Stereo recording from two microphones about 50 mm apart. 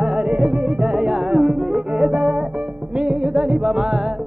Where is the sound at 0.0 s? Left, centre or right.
Right.